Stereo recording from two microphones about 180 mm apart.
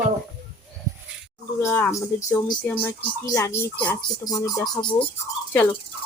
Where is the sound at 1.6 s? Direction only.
15° left (ahead or behind).